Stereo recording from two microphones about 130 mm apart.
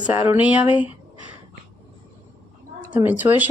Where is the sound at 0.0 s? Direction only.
15° right (ahead or behind).